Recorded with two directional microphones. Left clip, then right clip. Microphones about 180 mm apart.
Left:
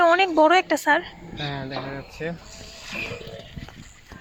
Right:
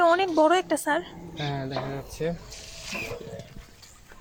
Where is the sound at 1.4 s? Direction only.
50° right (ahead or behind).